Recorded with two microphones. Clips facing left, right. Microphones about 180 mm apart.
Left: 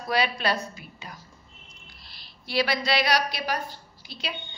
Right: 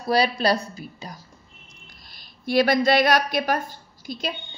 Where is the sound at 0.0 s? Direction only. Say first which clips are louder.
Right 5 dB; 35° right (ahead or behind).